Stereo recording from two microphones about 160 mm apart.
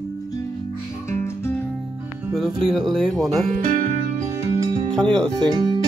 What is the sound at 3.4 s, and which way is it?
Music, 50° right (ahead or behind).